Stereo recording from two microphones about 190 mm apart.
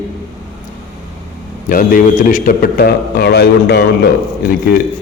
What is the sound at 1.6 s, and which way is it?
Speech, 45° left (ahead or behind).